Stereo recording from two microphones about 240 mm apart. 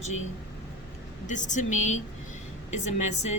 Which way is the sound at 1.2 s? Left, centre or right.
Left.